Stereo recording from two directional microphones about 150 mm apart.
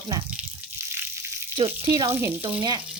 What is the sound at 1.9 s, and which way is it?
Frying, 20° right (ahead or behind).